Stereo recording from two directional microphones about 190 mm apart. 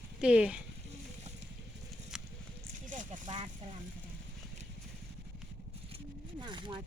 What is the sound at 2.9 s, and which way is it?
Speech, 40° right (ahead or behind).